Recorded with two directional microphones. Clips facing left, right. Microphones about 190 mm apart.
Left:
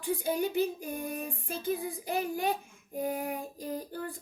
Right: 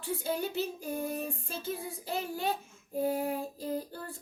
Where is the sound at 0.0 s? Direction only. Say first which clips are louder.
Left 3 dB; 15° left (ahead or behind).